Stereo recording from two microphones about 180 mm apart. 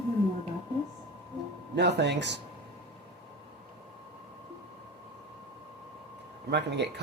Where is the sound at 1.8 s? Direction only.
70° right (ahead or behind).